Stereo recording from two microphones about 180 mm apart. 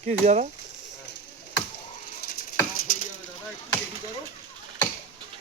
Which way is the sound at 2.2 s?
55° left (ahead or behind).